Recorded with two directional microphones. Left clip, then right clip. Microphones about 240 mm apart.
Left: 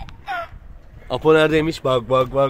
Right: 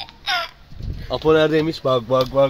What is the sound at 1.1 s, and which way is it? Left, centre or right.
Speech, centre.